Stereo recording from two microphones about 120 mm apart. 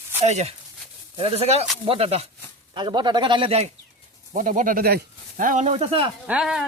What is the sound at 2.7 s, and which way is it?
Speech, 40° right (ahead or behind).